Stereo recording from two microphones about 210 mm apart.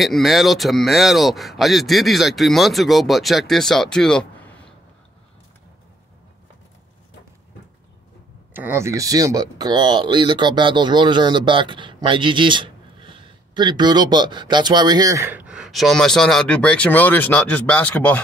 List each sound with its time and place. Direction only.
0.0 s speech: centre (ahead or behind)
8.5 s speech: 10° right (ahead or behind); by 18.2 s 5° left (ahead or behind)